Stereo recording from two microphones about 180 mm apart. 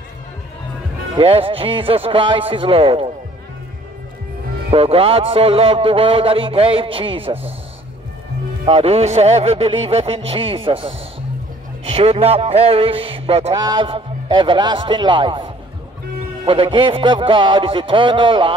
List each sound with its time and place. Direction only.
1.1 s a man's voice: 30° right (ahead or behind)
4.6 s a man's voice: 30° right (ahead or behind)
8.6 s a man's voice: 35° right (ahead or behind)